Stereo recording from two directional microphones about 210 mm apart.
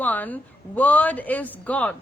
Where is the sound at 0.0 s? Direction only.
10° left (ahead or behind).